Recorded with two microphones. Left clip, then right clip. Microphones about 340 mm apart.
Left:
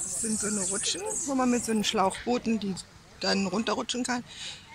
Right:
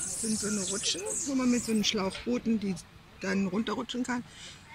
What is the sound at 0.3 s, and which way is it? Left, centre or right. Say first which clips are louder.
Speech: left 1 dB; centre.